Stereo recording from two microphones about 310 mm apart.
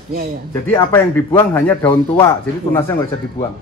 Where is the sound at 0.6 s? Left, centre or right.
Centre.